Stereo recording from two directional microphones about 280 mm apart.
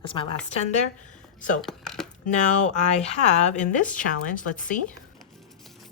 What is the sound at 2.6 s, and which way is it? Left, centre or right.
Speech, left.